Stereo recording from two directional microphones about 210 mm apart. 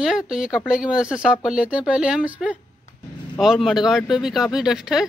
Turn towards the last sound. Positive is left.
turn(degrees=0)  # may be behind; listen again after turning